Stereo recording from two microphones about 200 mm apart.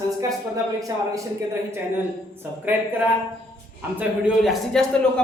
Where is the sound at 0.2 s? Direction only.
15° right (ahead or behind).